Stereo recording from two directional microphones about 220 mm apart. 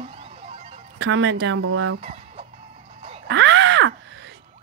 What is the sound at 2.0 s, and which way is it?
Fowl, 30° right (ahead or behind).